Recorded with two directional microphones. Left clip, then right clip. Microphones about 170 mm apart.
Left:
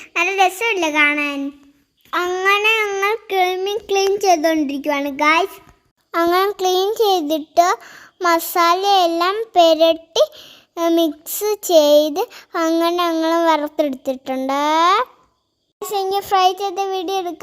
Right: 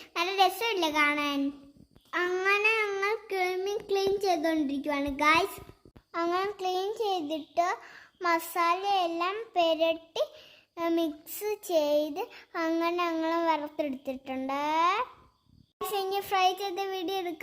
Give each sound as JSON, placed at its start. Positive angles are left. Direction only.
{"t": 0.0, "sound": "a child's voice", "side_deg": 30}
{"t": 6.1, "sound": "a child's voice", "side_deg": 40}